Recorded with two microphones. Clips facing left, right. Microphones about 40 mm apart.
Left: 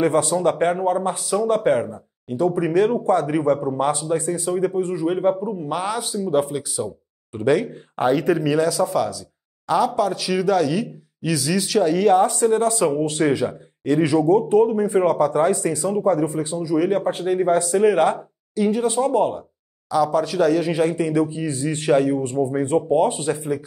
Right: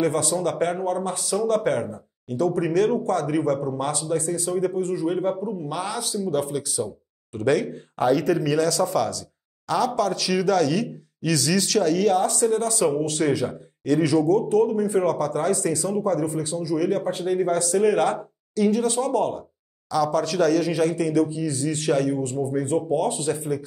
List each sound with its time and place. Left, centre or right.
0.0 s speech: left
8.0 s speech: left